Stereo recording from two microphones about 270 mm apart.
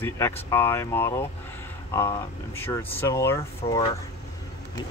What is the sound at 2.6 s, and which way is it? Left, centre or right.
Speech, centre.